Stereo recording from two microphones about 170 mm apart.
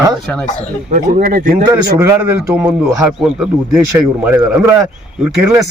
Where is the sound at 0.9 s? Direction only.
50° right (ahead or behind).